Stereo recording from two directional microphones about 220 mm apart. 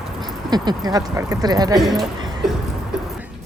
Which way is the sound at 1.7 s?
Centre (ahead or behind).